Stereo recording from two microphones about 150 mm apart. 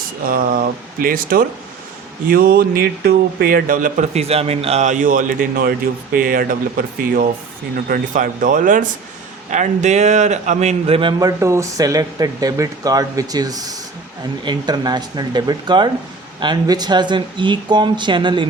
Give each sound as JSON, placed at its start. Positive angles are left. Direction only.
{"t": 0.3, "sound": "speech", "side_deg": -75}
{"t": 2.2, "sound": "speech", "side_deg": -85}
{"t": 11.2, "sound": "speech", "side_deg": -20}